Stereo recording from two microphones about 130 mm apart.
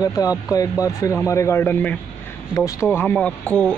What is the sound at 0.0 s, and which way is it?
Speech, 30° left (ahead or behind).